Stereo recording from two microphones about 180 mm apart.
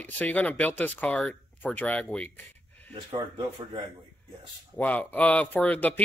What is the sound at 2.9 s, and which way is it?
Speech, 30° right (ahead or behind).